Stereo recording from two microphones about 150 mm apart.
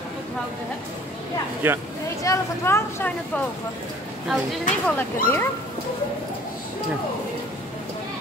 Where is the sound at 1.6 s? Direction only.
10° right (ahead or behind).